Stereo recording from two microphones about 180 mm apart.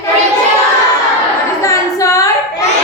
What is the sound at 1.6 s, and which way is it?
Singing, 20° left (ahead or behind).